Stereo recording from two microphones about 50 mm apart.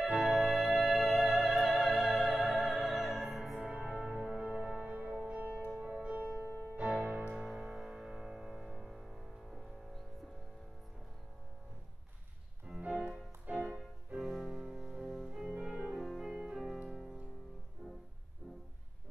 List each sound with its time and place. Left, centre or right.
0.2 s music: centre
3.6 s music: centre
7.0 s music: right
7.3 s music: centre
12.6 s music: centre
15.6 s music: centre
16.0 s music: centre